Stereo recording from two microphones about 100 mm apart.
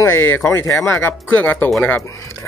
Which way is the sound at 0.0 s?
25° left (ahead or behind).